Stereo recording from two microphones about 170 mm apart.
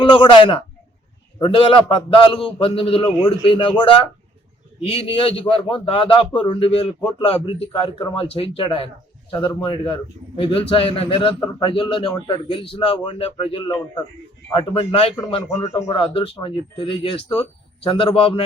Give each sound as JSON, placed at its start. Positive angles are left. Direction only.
{"t": 0.0, "sound": "a man's voice", "side_deg": 30}